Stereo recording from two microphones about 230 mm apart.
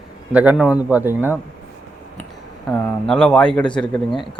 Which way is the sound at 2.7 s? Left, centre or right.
Centre.